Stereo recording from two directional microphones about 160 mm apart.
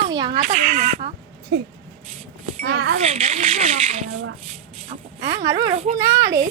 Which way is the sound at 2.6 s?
80° right.